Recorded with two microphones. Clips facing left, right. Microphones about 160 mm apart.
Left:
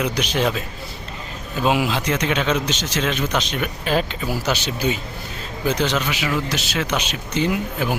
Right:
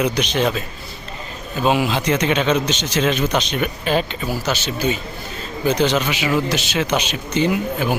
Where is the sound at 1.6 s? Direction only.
Centre (ahead or behind).